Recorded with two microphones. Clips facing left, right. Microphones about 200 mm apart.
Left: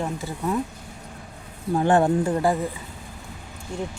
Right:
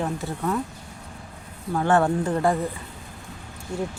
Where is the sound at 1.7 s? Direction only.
15° left (ahead or behind).